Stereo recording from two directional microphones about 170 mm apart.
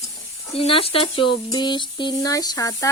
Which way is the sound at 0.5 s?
35° left (ahead or behind).